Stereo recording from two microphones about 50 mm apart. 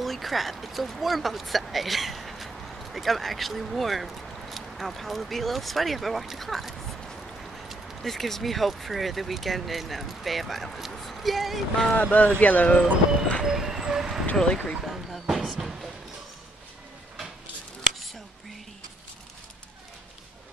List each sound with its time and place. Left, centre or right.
0.0 s speech: centre
11.9 s speech: left
13.4 s vehicle: centre
14.3 s speech: centre
14.8 s speech: centre
15.2 s basketball bounce: centre